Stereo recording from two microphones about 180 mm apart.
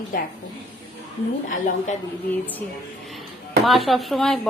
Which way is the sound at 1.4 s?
45° left (ahead or behind).